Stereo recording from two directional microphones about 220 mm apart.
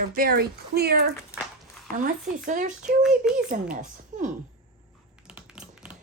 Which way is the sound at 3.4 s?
40° right (ahead or behind).